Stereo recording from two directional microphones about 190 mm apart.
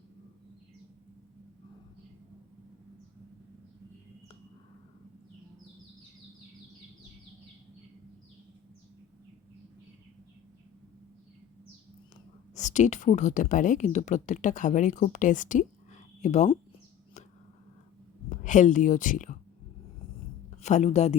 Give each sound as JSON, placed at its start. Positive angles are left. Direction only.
{"t": 12.5, "sound": "speech", "side_deg": 40}
{"t": 18.3, "sound": "speech", "side_deg": 40}
{"t": 20.6, "sound": "speech", "side_deg": 35}